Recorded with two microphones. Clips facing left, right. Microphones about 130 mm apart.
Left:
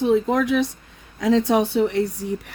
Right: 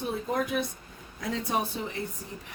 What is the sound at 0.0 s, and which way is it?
Speech, 90° left.